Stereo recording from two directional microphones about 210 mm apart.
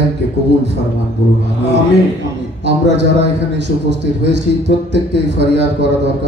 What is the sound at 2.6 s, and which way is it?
A man's voice, 55° right (ahead or behind).